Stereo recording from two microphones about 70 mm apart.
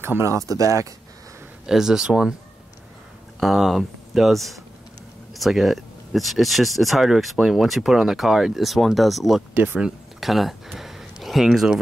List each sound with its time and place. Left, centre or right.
0.0 s speech: right
1.7 s speech: centre
3.3 s speech: centre
9.5 s speech: right
10.2 s speech: centre